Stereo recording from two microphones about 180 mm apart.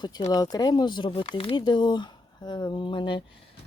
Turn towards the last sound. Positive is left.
turn(degrees=25)  # may be behind; listen again after turning